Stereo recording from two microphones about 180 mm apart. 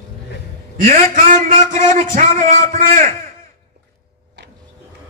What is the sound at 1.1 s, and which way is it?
A man's voice, 50° right (ahead or behind).